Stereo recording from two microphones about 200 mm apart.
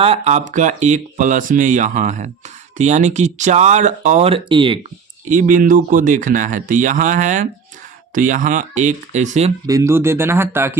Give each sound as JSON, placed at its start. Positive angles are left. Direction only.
{"t": 0.0, "sound": "speech", "side_deg": -30}
{"t": 5.3, "sound": "speech", "side_deg": -40}
{"t": 9.6, "sound": "speech", "side_deg": -15}